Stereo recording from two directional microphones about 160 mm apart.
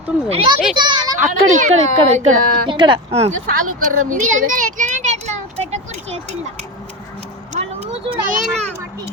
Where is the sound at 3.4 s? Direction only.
60° right (ahead or behind).